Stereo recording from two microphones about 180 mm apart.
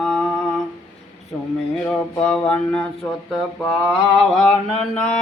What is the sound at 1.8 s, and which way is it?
Mantra, 5° left (ahead or behind).